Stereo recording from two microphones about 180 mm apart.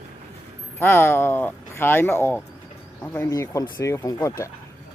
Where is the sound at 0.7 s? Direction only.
10° left (ahead or behind).